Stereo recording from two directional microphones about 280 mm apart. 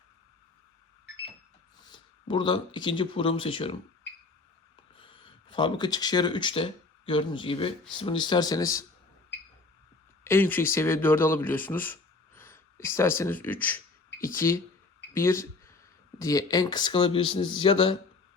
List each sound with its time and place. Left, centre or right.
1.9 s speech: centre
4.9 s speech: centre
10.2 s speech: centre